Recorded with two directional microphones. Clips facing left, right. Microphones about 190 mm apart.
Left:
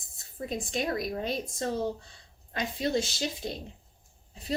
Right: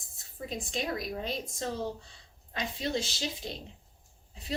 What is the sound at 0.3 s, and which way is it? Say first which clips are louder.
Speech: left 3 dB; 45° left (ahead or behind).